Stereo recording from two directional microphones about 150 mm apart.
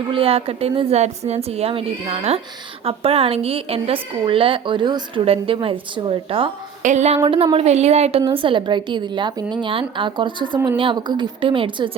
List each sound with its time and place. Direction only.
0.1 s a woman's voice: 40° right (ahead or behind)
6.8 s a woman's voice: 50° right (ahead or behind)
7.3 s a woman's voice: 35° right (ahead or behind)